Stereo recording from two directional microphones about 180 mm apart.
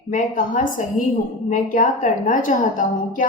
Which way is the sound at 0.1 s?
45° left (ahead or behind).